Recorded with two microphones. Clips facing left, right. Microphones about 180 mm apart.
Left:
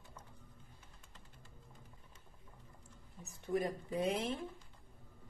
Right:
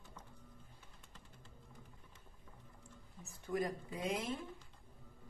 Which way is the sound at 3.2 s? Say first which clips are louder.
Left 2 dB; 20° left (ahead or behind).